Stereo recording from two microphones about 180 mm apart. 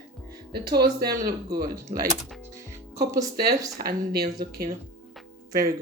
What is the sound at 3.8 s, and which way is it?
Speech, 60° right (ahead or behind).